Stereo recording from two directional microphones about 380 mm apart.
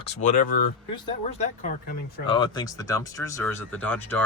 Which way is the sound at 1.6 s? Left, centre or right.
Centre.